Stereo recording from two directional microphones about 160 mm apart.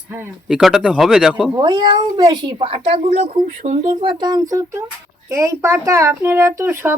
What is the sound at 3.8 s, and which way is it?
Speech, 35° right (ahead or behind).